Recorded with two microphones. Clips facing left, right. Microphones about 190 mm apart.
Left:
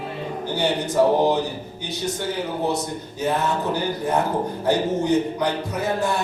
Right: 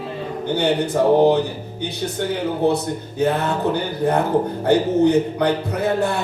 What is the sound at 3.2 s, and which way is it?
Speech, 60° right (ahead or behind).